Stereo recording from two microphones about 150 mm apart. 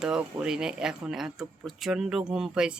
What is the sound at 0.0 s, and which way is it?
Speech, 5° right (ahead or behind).